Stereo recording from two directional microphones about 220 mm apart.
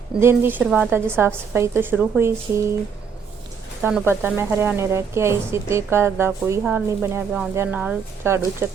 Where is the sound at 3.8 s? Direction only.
10° right (ahead or behind).